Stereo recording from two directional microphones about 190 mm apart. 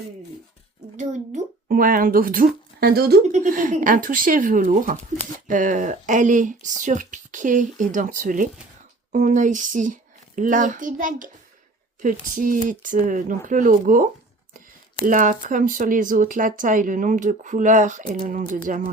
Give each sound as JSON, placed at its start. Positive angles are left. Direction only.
{"t": 0.9, "sound": "speech", "side_deg": -40}